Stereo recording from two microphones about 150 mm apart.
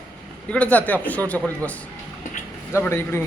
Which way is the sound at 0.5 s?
10° left (ahead or behind).